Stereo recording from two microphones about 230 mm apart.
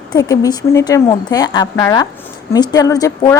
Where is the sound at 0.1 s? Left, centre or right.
Centre.